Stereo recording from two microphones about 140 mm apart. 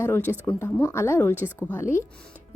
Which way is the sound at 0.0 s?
15° left (ahead or behind).